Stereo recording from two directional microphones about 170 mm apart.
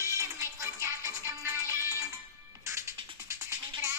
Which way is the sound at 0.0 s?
15° right (ahead or behind).